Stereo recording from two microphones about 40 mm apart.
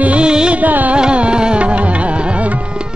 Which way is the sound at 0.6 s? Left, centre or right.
Right.